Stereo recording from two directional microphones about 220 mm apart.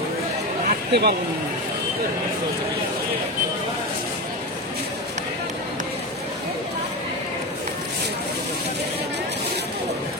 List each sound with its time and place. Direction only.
0.7 s chatter: 45° right (ahead or behind)